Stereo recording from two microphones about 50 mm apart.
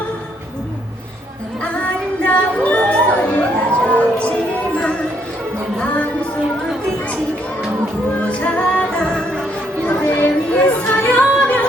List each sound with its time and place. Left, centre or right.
1.6 s music: left
8.2 s music: left
9.8 s a sound: left
10.5 s music: left